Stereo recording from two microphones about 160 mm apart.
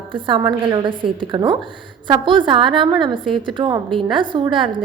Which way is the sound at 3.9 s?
Centre (ahead or behind).